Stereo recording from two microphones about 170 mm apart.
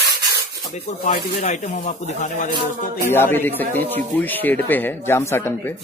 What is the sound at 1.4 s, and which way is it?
Speech, 45° left (ahead or behind).